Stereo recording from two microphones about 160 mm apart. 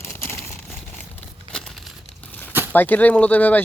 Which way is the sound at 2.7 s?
10° left (ahead or behind).